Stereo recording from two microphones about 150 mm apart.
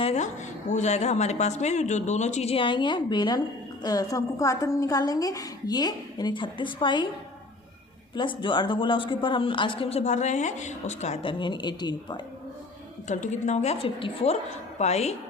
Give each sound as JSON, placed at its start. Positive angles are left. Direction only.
{"t": 0.0, "sound": "a woman's voice", "side_deg": 45}
{"t": 8.1, "sound": "speech", "side_deg": 30}
{"t": 13.1, "sound": "speech", "side_deg": 55}